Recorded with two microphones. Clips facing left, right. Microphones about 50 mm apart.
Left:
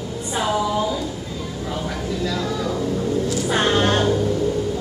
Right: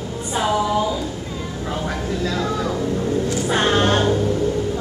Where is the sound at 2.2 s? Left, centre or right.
Right.